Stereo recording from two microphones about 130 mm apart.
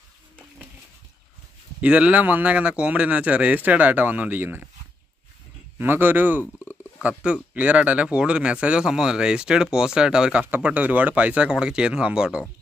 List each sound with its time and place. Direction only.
1.8 s speech: 10° right (ahead or behind)
5.8 s speech: 15° right (ahead or behind)
6.4 s a sound: 20° left (ahead or behind)
7.0 s speech: 10° right (ahead or behind)